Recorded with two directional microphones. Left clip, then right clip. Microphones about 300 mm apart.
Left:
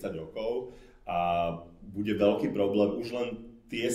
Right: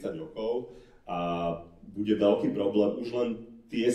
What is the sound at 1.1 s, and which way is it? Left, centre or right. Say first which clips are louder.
Speech: left 3 dB; left.